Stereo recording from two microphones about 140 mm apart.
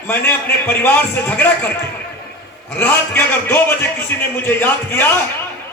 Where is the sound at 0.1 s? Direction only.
15° left (ahead or behind).